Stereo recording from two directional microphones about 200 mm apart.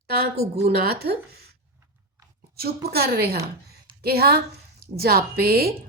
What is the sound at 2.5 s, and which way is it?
A woman's voice, 50° right (ahead or behind).